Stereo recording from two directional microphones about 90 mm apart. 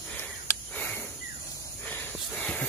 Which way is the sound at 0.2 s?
20° left (ahead or behind).